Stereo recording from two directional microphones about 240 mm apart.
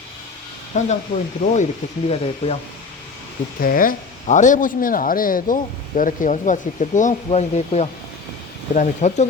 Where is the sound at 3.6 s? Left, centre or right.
Left.